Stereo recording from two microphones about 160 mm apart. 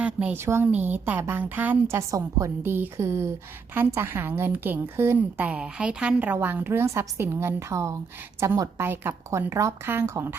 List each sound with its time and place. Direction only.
0.0 s a woman's voice: 10° right (ahead or behind)